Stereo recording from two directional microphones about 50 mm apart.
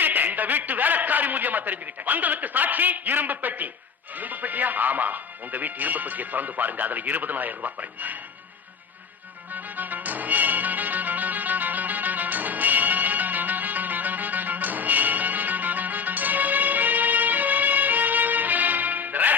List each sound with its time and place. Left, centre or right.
0.0 s a man's voice: right
9.5 s music: right